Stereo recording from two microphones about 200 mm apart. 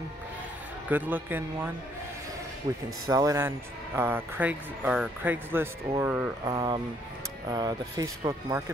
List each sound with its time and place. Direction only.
0.8 s speech: 10° right (ahead or behind)
3.1 s speech: 15° right (ahead or behind)